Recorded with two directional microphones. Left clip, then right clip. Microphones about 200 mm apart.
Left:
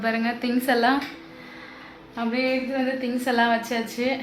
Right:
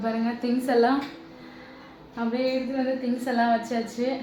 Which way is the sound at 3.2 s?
15° left (ahead or behind).